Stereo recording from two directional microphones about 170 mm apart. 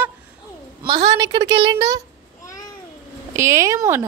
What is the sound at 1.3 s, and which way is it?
Speech, 25° right (ahead or behind).